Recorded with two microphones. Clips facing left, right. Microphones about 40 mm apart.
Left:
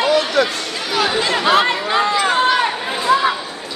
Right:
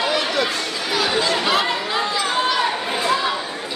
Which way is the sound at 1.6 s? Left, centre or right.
Left.